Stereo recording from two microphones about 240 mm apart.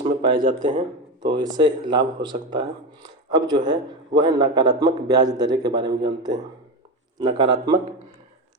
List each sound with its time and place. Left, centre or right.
0.0 s a sound: right
0.4 s speech: right
1.4 s a man's voice: centre
7.2 s speech: centre